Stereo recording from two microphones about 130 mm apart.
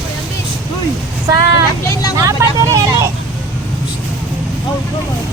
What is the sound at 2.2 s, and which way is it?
Vehicle, 25° right (ahead or behind).